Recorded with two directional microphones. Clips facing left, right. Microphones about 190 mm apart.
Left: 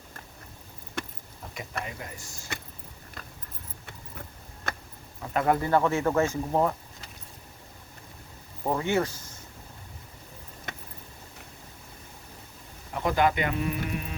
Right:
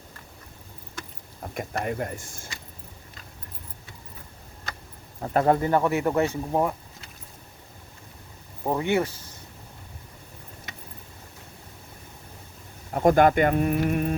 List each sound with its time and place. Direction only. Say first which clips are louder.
1.4 s speech: right 6 dB; 55° right (ahead or behind)
5.2 s speech: right 4 dB; 35° right (ahead or behind)
5.6 s speech: right 1 dB; 15° right (ahead or behind)
8.6 s speech: right 2 dB; 15° right (ahead or behind)
12.9 s speech: right 7 dB; 45° right (ahead or behind)